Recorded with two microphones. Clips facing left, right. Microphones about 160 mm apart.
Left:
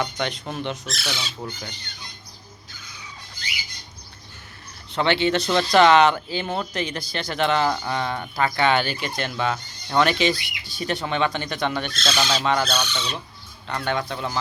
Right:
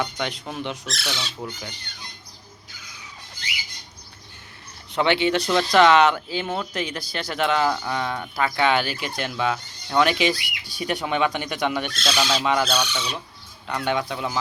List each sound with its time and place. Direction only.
0.0 s speech: 5° right (ahead or behind)
4.9 s speech: 10° right (ahead or behind)
5.5 s speech: centre (ahead or behind)